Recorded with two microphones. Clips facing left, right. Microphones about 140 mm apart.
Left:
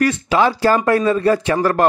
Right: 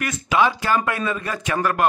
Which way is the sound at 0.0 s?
35° left (ahead or behind).